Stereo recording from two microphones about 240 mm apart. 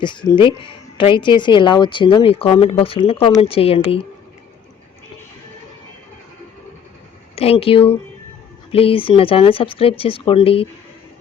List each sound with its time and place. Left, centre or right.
0.0 s speech: centre
7.3 s speech: left